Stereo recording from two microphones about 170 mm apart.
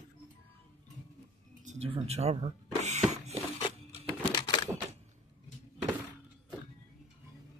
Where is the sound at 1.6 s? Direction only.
35° right (ahead or behind).